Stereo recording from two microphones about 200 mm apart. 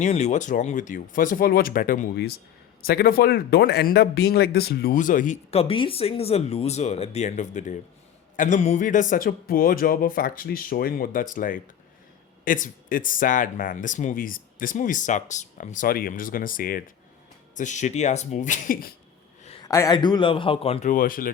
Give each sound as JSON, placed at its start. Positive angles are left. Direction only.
{"t": 0.0, "sound": "speech", "side_deg": 35}
{"t": 19.6, "sound": "a man's voice", "side_deg": 15}
{"t": 20.9, "sound": "speech", "side_deg": 45}